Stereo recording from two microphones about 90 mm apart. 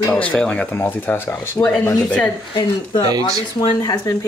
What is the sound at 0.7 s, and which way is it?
Speech, 20° left (ahead or behind).